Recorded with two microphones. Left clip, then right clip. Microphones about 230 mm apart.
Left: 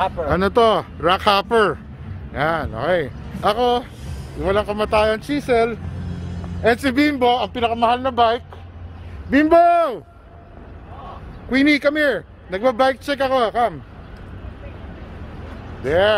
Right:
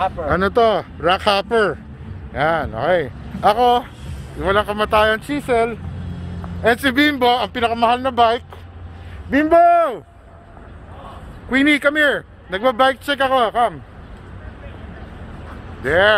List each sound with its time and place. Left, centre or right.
0.0 s speech: centre
2.3 s speech: centre
7.8 s speech: right
9.3 s speech: centre
11.5 s speech: centre
15.8 s speech: centre